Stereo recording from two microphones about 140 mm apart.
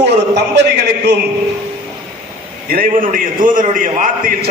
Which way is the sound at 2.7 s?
85° right.